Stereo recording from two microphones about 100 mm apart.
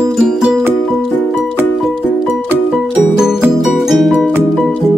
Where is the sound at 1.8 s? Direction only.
Centre (ahead or behind).